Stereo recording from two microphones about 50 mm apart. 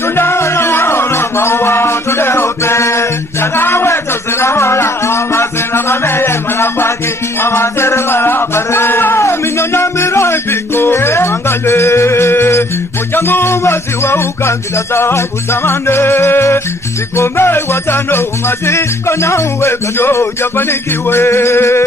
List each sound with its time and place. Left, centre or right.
0.1 s music: left
3.5 s music: left
18.7 s music: left